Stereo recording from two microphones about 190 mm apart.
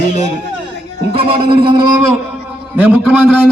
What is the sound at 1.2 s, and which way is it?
Speech, 25° right (ahead or behind).